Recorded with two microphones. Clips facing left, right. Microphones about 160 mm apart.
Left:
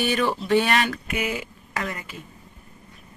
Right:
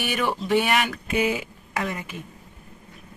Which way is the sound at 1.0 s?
30° right (ahead or behind).